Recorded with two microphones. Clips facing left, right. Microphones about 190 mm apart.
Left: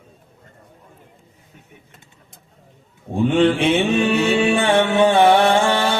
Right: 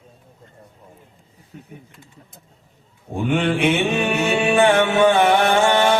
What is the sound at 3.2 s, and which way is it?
Mantra, 30° left (ahead or behind).